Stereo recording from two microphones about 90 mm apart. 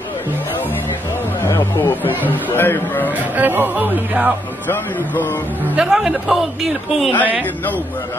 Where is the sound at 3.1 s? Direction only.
20° right (ahead or behind).